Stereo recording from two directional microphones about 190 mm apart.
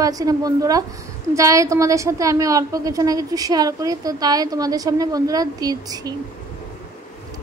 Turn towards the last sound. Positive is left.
turn(degrees=-20)  # may be behind; listen again after turning